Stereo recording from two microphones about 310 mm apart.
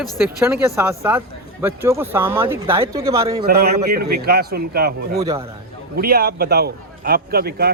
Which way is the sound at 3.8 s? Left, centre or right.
Right.